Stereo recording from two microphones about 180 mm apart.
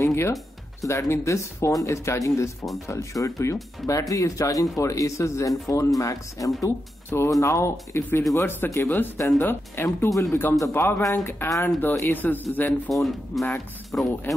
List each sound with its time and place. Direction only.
0.0 s speech: 15° left (ahead or behind)
14.3 s speech: 10° left (ahead or behind)